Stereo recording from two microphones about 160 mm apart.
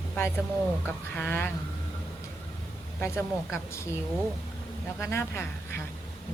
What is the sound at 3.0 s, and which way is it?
Speech, 15° left (ahead or behind).